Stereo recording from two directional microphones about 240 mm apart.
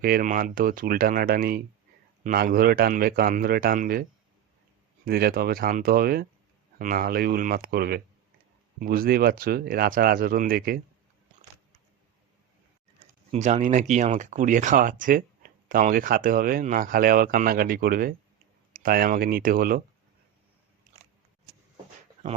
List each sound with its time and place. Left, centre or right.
0.0 s speech: right
5.0 s speech: right
13.3 s speech: right